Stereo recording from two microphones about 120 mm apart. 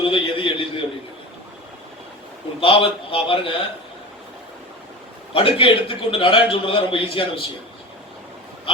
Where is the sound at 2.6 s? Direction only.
50° left (ahead or behind).